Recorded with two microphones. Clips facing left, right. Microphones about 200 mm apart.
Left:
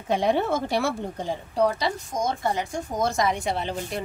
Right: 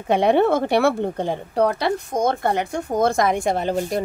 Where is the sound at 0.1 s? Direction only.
65° right (ahead or behind).